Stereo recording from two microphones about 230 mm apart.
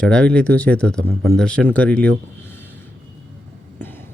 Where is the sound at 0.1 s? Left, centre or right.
Centre.